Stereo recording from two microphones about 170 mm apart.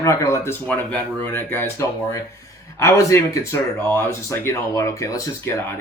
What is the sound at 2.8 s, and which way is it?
Speech, 15° left (ahead or behind).